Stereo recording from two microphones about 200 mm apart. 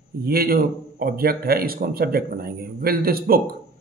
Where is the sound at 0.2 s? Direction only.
50° right (ahead or behind).